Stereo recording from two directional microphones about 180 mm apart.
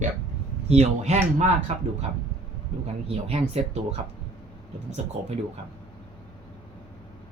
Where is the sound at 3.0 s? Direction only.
35° right (ahead or behind).